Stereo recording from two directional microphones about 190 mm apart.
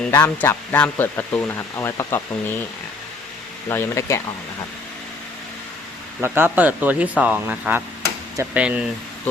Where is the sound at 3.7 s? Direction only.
15° left (ahead or behind).